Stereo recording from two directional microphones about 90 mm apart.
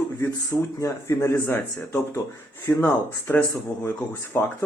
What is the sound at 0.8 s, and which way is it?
Speech, 35° left (ahead or behind).